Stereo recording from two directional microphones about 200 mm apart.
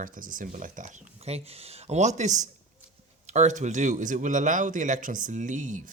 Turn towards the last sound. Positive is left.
turn(degrees=-40)  # may be behind; listen again after turning